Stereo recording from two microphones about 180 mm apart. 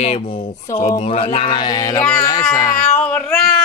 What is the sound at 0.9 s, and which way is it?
Mantra, 35° left (ahead or behind).